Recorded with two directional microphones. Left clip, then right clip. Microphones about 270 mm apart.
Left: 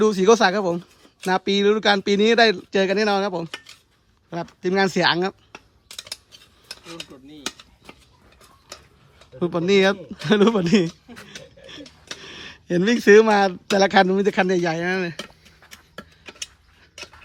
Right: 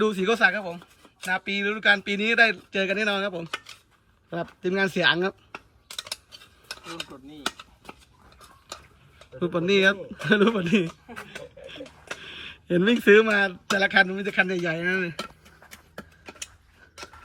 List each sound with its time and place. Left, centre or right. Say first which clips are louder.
0.0 s speech: left 5 dB; centre
4.3 s computer keyboard: left 3 dB; centre
9.4 s speech: left 3 dB; centre
12.2 s speech: left 1 dB; centre
13.7 s a sound: left 5 dB; centre